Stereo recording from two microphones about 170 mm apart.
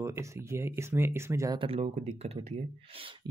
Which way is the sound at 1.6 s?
35° right (ahead or behind).